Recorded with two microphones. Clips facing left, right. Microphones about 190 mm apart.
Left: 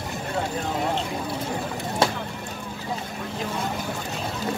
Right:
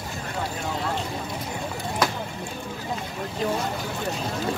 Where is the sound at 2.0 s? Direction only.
25° left (ahead or behind).